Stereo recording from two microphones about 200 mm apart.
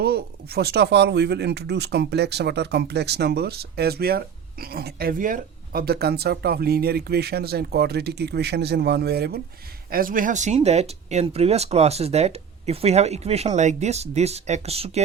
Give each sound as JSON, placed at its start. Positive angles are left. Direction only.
{"t": 0.0, "sound": "speech", "side_deg": -50}